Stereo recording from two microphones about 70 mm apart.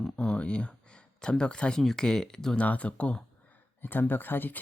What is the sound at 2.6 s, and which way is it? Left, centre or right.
Speech, centre.